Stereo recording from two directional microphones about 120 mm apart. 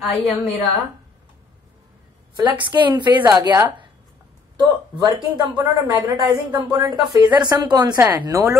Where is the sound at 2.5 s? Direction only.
40° right (ahead or behind).